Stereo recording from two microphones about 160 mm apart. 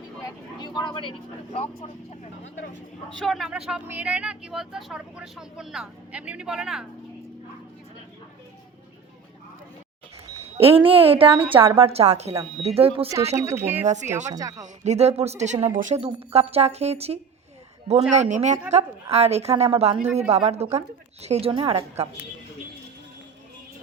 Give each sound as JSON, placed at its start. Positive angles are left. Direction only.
{"t": 0.2, "sound": "vehicle", "side_deg": 25}
{"t": 3.2, "sound": "speech", "side_deg": 0}
{"t": 10.6, "sound": "speech", "side_deg": -35}
{"t": 13.3, "sound": "speech", "side_deg": -15}
{"t": 13.8, "sound": "a woman's voice", "side_deg": -50}
{"t": 14.3, "sound": "speech", "side_deg": -20}
{"t": 14.8, "sound": "a woman's voice", "side_deg": -40}